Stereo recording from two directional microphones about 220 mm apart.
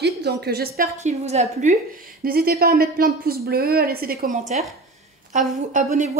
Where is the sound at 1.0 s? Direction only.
30° right (ahead or behind).